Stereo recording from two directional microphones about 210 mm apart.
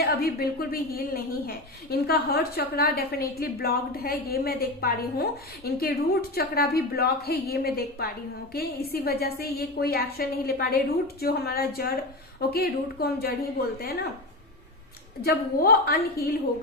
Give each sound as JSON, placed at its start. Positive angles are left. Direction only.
{"t": 0.0, "sound": "a woman's voice", "side_deg": 45}
{"t": 15.2, "sound": "a woman's voice", "side_deg": 45}